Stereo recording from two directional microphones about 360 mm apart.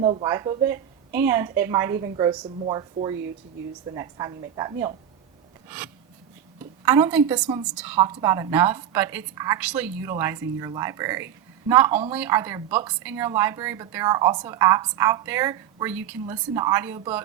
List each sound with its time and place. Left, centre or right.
0.0 s a woman's voice: centre
6.8 s a woman's voice: centre